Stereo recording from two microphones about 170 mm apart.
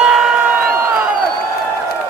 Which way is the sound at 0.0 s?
Centre (ahead or behind).